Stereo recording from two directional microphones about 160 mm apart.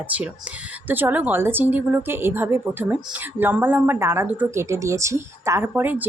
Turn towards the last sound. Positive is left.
turn(degrees=-10)  # may be behind; listen again after turning